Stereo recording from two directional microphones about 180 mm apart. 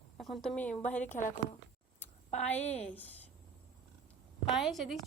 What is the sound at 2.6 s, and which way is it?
Speech, 35° left (ahead or behind).